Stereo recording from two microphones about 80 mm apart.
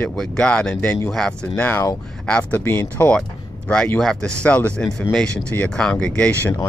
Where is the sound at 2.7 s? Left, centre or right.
Left.